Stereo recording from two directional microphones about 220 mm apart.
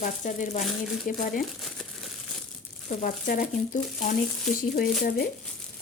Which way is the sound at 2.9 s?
40° left (ahead or behind).